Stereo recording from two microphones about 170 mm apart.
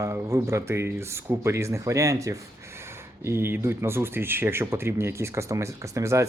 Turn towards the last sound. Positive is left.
turn(degrees=-15)  # may be behind; listen again after turning